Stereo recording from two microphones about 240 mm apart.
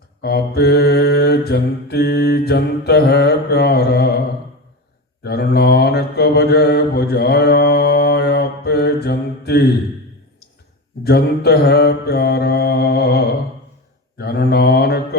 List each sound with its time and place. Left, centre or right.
0.2 s mantra: left
5.2 s mantra: left
11.0 s mantra: left